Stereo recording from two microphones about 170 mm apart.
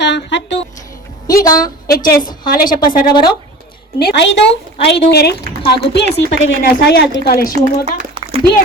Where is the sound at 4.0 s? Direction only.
90° left.